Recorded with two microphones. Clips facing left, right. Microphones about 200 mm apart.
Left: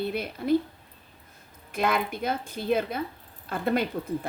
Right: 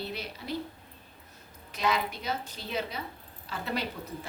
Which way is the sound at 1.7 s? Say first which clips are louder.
Left 3 dB; 55° left (ahead or behind).